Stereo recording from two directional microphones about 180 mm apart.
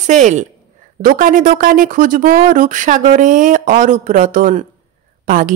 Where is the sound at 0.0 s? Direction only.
40° right (ahead or behind).